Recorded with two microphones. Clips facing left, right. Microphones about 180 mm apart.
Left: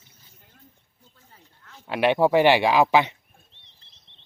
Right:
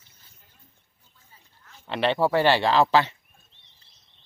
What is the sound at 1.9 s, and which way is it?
Speech, 10° left (ahead or behind).